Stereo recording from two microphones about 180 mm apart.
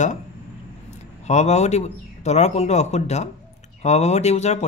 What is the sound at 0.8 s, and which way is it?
Speech, 40° left (ahead or behind).